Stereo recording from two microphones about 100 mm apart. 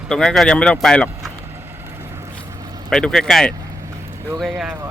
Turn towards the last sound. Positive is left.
turn(degrees=-10)  # may be behind; listen again after turning